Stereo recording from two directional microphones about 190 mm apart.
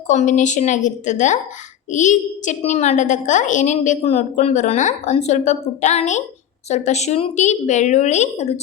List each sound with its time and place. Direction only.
0.1 s a woman's voice: 40° left (ahead or behind)